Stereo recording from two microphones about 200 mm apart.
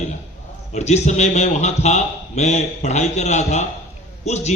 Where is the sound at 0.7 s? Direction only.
35° left (ahead or behind).